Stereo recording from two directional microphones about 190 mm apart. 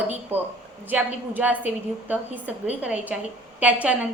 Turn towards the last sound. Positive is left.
turn(degrees=-5)  # may be behind; listen again after turning